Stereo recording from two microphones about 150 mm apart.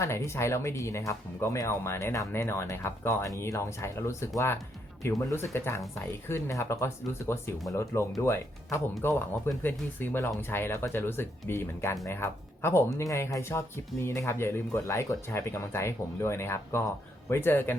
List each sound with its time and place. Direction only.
0.0 s speech: 20° left (ahead or behind)